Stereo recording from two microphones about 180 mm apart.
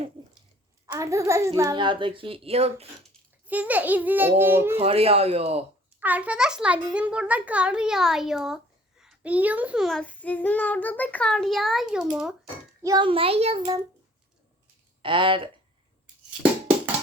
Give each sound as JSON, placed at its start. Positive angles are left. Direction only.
{"t": 0.2, "sound": "a sound", "side_deg": -25}
{"t": 0.9, "sound": "a child's voice", "side_deg": -15}
{"t": 3.4, "sound": "a child's voice", "side_deg": -10}
{"t": 4.7, "sound": "speech", "side_deg": -35}
{"t": 6.0, "sound": "a child's voice", "side_deg": -10}
{"t": 12.8, "sound": "speech", "side_deg": -20}
{"t": 15.0, "sound": "a child's voice", "side_deg": -30}
{"t": 16.4, "sound": "music", "side_deg": -10}